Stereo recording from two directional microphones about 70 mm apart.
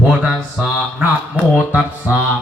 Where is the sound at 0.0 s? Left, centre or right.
Centre.